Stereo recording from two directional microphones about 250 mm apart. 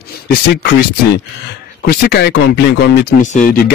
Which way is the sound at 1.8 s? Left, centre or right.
Left.